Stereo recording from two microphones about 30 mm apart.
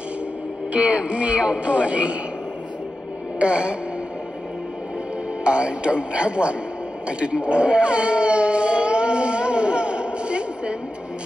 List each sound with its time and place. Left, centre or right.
0.7 s speech: right
3.3 s music: right
5.4 s speech: right
7.1 s howl: right